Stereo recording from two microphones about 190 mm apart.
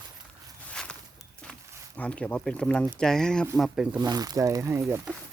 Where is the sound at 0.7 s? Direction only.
5° left (ahead or behind).